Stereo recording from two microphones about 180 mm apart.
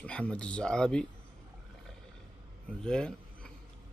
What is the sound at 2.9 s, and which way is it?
Speech, 5° left (ahead or behind).